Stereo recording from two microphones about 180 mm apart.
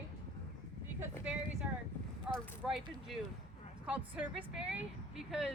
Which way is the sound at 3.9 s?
5° right (ahead or behind).